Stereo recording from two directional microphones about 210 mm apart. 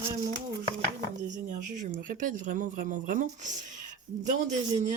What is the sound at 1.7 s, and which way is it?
Speech, 35° right (ahead or behind).